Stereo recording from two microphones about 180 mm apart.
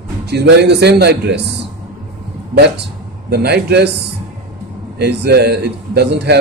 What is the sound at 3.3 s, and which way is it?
Speech, 65° right (ahead or behind).